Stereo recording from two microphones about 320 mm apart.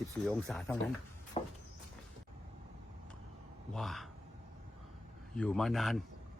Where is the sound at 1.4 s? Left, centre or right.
Centre.